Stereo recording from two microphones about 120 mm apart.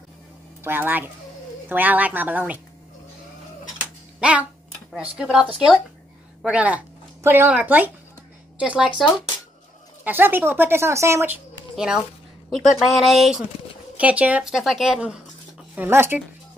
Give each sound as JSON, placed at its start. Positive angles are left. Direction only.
{"t": 0.7, "sound": "speech", "side_deg": -15}
{"t": 4.2, "sound": "a woman's voice", "side_deg": -10}
{"t": 10.0, "sound": "speech", "side_deg": -15}
{"t": 11.7, "sound": "a child's voice", "side_deg": -5}
{"t": 13.9, "sound": "a woman's voice", "side_deg": -10}